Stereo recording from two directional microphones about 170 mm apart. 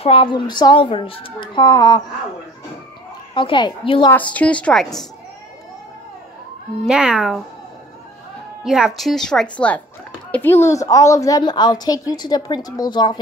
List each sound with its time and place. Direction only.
0.0 s a woman's voice: 35° left (ahead or behind)
3.3 s a woman's voice: 30° left (ahead or behind)
4.1 s a woman's voice: 10° left (ahead or behind)
6.9 s speech: 5° right (ahead or behind)
8.6 s a woman's voice: 5° right (ahead or behind); by 13.2 s 25° left (ahead or behind)